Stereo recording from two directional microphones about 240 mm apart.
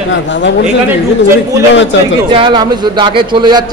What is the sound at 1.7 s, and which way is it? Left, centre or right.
Speech, left.